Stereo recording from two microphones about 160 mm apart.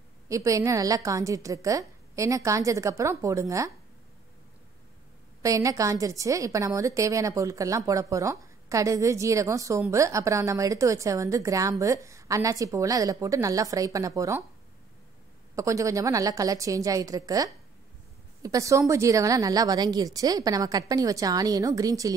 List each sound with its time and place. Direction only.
0.3 s a woman's voice: 20° right (ahead or behind)
5.4 s a woman's voice: 20° right (ahead or behind)
15.5 s a woman's voice: 20° right (ahead or behind)